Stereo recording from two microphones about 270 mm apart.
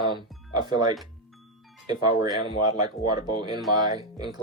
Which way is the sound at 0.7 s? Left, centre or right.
Centre.